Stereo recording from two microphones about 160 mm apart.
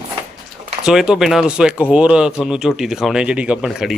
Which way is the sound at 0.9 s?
5° right (ahead or behind).